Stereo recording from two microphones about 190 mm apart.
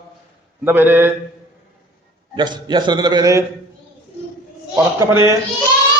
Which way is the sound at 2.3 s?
25° right (ahead or behind).